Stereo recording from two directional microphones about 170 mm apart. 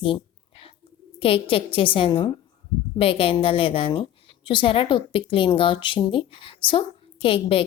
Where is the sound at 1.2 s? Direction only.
35° left (ahead or behind).